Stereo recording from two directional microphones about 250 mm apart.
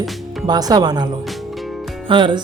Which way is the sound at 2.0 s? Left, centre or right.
Centre.